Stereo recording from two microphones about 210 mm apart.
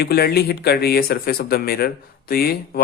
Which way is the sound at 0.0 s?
50° left (ahead or behind).